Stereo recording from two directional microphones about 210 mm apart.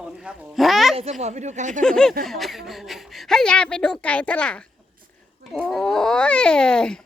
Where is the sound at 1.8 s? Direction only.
5° left (ahead or behind).